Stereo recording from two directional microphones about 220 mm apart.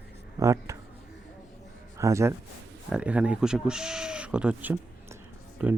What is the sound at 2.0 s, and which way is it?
Speech, 15° right (ahead or behind).